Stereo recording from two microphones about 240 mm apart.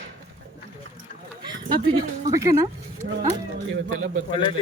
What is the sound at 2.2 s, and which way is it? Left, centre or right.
Speech, centre.